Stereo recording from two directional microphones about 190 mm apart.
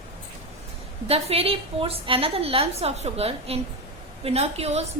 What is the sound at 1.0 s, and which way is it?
A woman's voice, 30° right (ahead or behind).